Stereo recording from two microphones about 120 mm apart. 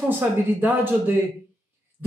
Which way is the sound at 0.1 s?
15° right (ahead or behind).